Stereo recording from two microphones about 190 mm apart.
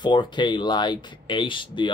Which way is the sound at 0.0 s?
25° left (ahead or behind).